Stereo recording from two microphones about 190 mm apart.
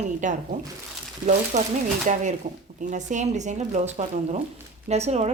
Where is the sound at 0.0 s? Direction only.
40° right (ahead or behind).